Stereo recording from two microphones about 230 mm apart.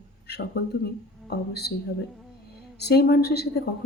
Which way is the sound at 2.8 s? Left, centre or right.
Left.